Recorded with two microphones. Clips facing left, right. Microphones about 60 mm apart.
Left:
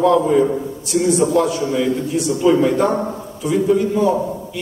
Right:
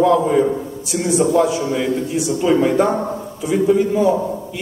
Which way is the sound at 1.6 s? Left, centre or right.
Centre.